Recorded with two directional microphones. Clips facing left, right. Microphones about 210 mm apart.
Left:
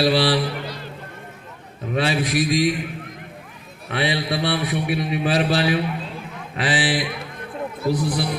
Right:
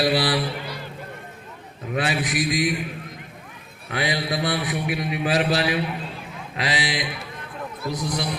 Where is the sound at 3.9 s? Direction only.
30° left (ahead or behind).